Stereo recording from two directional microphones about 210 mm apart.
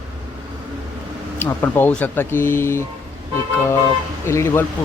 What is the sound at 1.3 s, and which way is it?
Speech, 10° left (ahead or behind).